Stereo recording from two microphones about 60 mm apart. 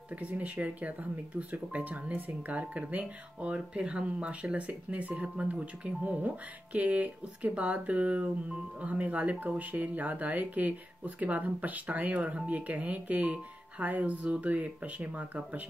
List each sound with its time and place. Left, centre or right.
0.2 s speech: right